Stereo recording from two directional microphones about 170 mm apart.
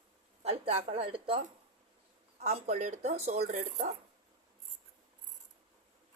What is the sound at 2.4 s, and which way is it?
Speech, 40° right (ahead or behind).